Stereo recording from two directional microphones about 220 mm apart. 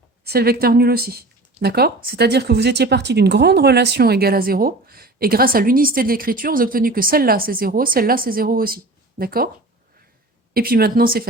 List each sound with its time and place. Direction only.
0.3 s speech: 45° right (ahead or behind)
10.5 s speech: 40° right (ahead or behind)